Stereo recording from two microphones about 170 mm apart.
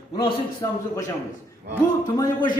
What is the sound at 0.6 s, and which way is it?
Speech, 20° left (ahead or behind).